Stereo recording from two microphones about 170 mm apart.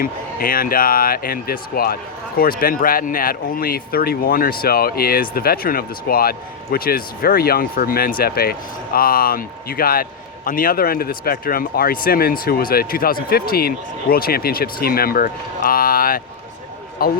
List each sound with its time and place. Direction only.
0.0 s a man's voice: 55° left (ahead or behind)